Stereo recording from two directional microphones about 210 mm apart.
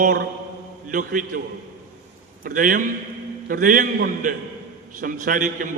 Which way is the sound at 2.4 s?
40° right (ahead or behind).